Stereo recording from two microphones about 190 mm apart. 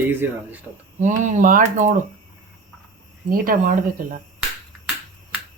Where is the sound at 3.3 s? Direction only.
45° right (ahead or behind).